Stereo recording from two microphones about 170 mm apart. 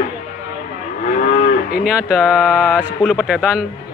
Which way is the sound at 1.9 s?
5° right (ahead or behind).